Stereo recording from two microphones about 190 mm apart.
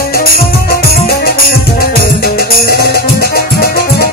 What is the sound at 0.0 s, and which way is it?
Music, 50° left (ahead or behind).